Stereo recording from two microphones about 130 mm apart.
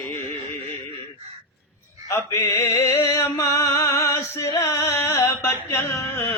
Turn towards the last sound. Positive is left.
turn(degrees=20)  # may be behind; listen again after turning